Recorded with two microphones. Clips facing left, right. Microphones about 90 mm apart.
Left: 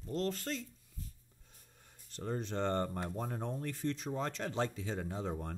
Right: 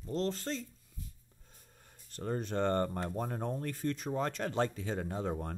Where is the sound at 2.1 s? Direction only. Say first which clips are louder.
Right 3 dB; 50° right (ahead or behind).